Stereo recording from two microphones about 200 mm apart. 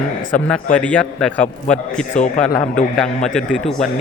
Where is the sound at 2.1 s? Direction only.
35° left (ahead or behind).